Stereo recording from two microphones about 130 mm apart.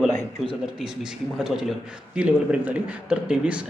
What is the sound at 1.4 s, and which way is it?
A man's voice, 5° right (ahead or behind).